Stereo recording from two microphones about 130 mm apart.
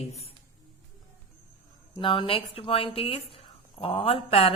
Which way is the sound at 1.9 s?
40° left (ahead or behind).